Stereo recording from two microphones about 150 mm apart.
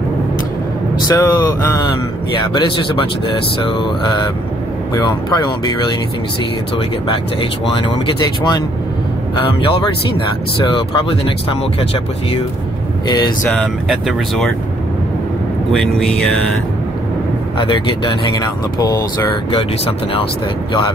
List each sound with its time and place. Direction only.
1.0 s speech: 25° left (ahead or behind)
7.7 s speech: 35° left (ahead or behind)
13.5 s speech: 5° left (ahead or behind)
15.7 s speech: 5° left (ahead or behind)
17.6 s speech: 35° left (ahead or behind)